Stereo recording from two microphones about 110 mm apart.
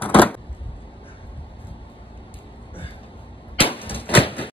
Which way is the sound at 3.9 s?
55° left (ahead or behind).